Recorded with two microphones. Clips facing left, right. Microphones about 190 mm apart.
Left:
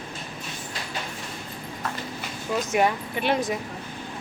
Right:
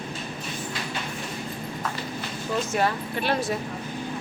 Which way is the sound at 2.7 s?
15° left (ahead or behind).